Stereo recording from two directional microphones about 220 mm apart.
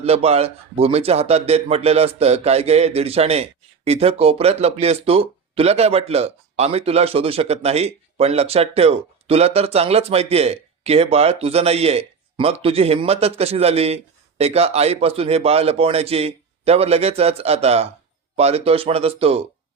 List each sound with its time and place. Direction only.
0.0 s a man's voice: 30° right (ahead or behind)